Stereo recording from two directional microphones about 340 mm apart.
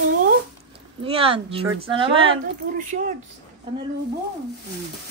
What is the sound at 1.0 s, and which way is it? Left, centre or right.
Speech, centre.